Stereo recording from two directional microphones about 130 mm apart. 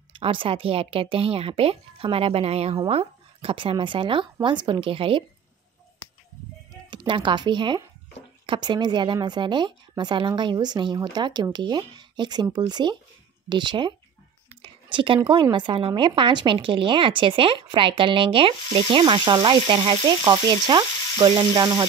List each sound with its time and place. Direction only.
0.1 s a woman's voice: 40° right (ahead or behind)
6.9 s a woman's voice: 40° right (ahead or behind)
14.6 s a sound: 40° right (ahead or behind)
15.5 s a woman's voice: 40° right (ahead or behind)
20.2 s a woman's voice: 30° right (ahead or behind)